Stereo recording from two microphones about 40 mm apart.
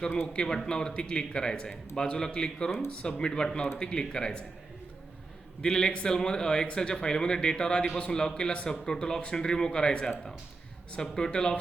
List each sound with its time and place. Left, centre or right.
0.3 s speech: centre
5.6 s speech: centre